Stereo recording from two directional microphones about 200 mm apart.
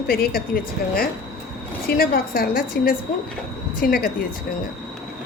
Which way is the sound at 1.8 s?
50° left (ahead or behind).